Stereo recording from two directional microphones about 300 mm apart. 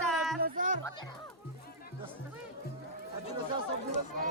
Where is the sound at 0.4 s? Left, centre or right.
Right.